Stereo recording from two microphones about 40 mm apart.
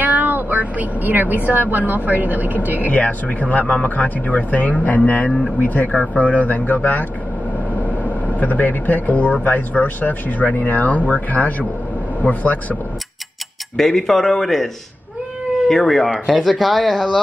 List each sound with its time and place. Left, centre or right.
0.0 s vehicle: right
1.5 s speech: right
2.9 s speech: left
13.7 s speech: centre
15.7 s speech: centre